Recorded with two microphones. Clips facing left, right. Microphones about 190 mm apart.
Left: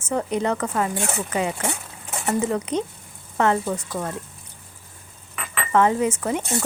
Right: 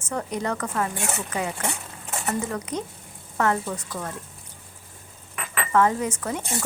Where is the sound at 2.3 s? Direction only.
30° left (ahead or behind).